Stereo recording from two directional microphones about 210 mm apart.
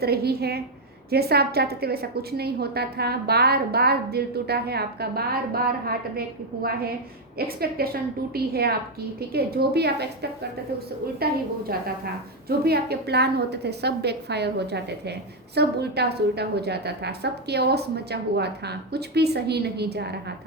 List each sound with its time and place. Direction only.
0.0 s a woman's voice: 50° right (ahead or behind)
12.5 s a woman's voice: 50° right (ahead or behind)